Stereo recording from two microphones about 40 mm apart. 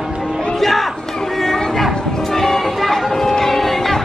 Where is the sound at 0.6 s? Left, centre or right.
Centre.